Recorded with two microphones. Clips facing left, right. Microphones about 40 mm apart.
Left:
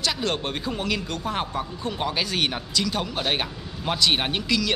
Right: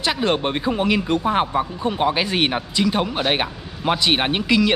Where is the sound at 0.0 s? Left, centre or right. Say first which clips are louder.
Right 6 dB; right.